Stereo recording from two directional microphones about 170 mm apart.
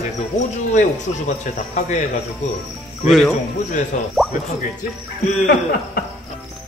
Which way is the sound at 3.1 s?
Centre (ahead or behind).